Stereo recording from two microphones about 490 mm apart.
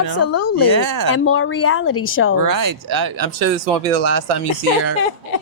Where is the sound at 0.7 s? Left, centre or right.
Right.